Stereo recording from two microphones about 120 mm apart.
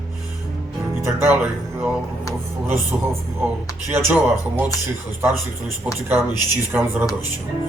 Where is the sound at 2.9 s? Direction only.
10° right (ahead or behind).